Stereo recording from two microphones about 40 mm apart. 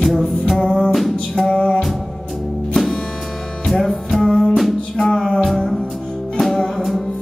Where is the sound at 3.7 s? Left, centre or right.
Centre.